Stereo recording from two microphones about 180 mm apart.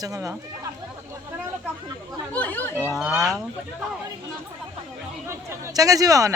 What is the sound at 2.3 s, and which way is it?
Chatter, 10° left (ahead or behind).